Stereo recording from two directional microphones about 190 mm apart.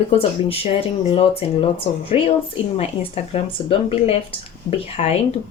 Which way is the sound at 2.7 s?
35° left (ahead or behind).